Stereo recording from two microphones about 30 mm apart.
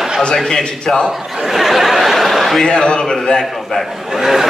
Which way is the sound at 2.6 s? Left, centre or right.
Left.